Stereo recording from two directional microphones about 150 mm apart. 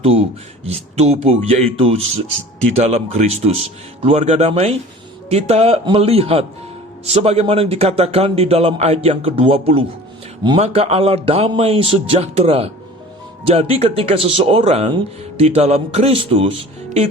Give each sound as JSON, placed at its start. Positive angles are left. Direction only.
{"t": 0.0, "sound": "speech", "side_deg": -40}